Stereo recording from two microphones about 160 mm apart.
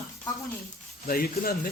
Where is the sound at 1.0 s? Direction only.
65° left (ahead or behind).